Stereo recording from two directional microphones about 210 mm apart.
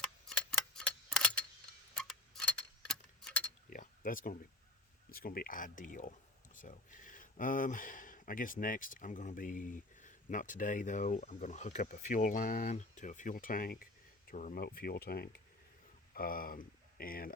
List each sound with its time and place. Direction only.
0.3 s tick-tock: 5° left (ahead or behind)
3.7 s a sound: 40° left (ahead or behind)
5.1 s speech: 45° left (ahead or behind)